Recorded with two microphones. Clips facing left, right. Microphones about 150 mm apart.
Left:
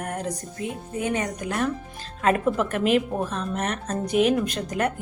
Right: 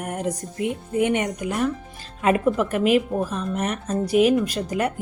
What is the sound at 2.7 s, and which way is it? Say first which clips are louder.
Speech: right 2 dB; 5° right (ahead or behind).